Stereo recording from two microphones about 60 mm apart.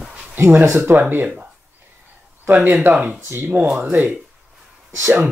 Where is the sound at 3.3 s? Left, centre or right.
Right.